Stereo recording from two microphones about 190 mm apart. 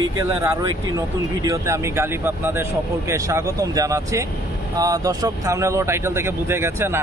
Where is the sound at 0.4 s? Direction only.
20° right (ahead or behind).